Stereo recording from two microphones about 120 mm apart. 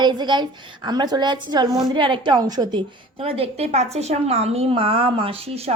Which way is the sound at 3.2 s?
50° right (ahead or behind).